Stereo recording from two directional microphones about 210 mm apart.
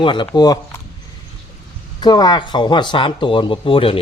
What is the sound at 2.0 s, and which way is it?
Speech, 20° left (ahead or behind).